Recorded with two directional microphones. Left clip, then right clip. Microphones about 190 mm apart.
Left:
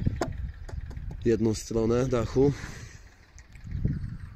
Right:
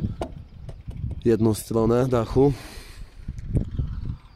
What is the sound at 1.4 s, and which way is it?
Speech, 20° right (ahead or behind).